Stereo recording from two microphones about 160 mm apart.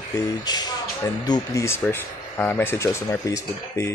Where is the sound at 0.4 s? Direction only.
25° left (ahead or behind).